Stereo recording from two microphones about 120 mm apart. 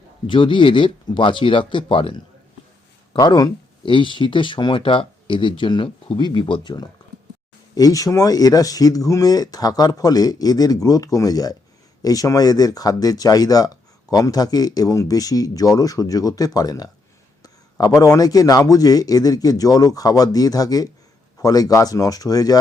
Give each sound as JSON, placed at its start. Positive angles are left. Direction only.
{"t": 0.3, "sound": "speech", "side_deg": 45}
{"t": 3.2, "sound": "speech", "side_deg": 30}
{"t": 7.8, "sound": "speech", "side_deg": 30}